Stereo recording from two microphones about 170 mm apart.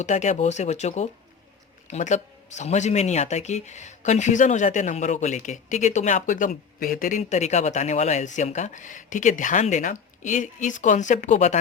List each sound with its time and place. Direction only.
0.0 s speech: 45° left (ahead or behind)